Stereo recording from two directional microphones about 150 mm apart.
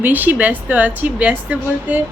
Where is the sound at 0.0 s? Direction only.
10° right (ahead or behind).